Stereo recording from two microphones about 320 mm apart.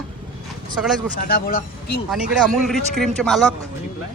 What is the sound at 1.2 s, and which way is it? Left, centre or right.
Speech, left.